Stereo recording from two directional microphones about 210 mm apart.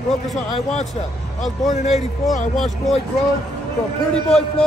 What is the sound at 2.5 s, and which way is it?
Speech, centre (ahead or behind).